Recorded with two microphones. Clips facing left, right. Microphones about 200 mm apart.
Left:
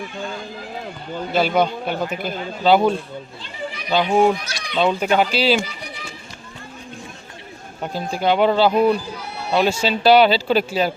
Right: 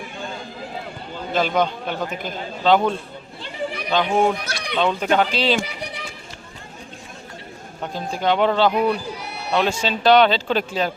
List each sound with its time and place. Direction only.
1.3 s speech: 5° left (ahead or behind)
3.4 s chatter: 60° right (ahead or behind)
3.8 s speech: 10° left (ahead or behind)
4.4 s speech: 60° right (ahead or behind)
4.8 s speech: 10° left (ahead or behind)
7.8 s speech: 5° left (ahead or behind)